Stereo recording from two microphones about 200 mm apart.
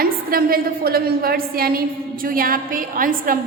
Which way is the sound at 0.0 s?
45° right (ahead or behind).